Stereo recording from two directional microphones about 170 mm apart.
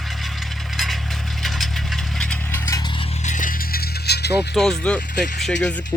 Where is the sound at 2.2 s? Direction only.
5° left (ahead or behind).